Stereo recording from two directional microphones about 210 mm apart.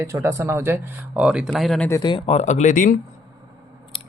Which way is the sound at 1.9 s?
20° left (ahead or behind).